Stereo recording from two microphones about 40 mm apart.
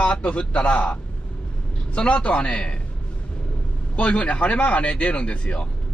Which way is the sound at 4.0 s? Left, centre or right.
Left.